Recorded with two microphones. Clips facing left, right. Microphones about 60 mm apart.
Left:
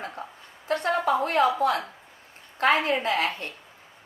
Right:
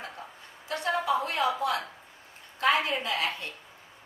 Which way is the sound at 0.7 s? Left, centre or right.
Left.